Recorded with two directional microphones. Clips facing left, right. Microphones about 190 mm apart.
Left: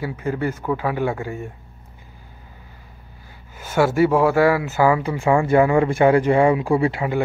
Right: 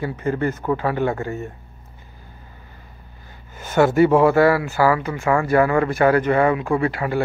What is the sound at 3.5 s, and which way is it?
Speech, 10° left (ahead or behind).